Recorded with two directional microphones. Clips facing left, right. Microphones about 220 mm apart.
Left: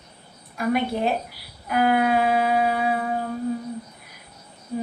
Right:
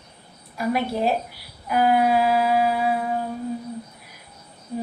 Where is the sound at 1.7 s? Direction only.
55° left (ahead or behind).